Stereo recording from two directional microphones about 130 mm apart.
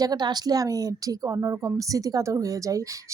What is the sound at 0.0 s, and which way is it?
A woman's voice, 30° right (ahead or behind).